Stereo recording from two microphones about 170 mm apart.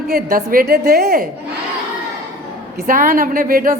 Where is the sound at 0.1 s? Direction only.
60° right (ahead or behind).